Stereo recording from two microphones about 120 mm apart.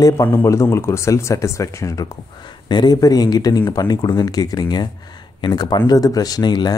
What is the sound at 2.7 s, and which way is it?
Speech, 35° left (ahead or behind).